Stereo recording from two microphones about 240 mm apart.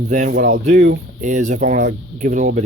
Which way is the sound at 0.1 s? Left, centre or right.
Right.